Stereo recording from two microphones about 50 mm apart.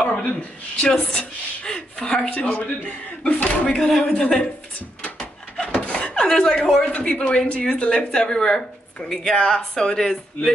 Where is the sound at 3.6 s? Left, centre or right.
Centre.